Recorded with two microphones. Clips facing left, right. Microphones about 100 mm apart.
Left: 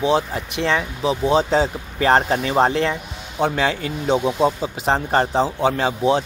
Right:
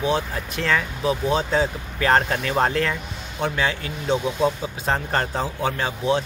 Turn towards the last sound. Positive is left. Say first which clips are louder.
# left 4 dB
turn(degrees=30)  # may be behind; listen again after turning